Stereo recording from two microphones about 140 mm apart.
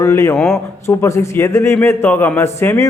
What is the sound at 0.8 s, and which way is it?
A man's voice, 20° left (ahead or behind).